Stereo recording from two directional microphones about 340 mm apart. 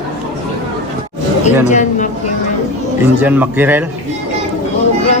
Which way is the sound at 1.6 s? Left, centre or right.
Left.